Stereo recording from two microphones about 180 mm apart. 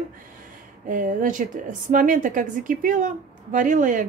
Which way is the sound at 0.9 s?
50° right (ahead or behind).